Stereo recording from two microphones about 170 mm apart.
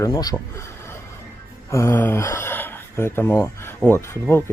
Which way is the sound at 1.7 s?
15° left (ahead or behind).